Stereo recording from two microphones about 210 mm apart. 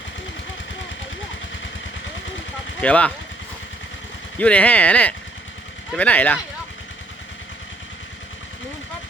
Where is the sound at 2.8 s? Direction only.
5° left (ahead or behind).